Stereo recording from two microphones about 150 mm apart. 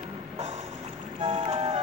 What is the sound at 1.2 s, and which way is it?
Music, 50° right (ahead or behind).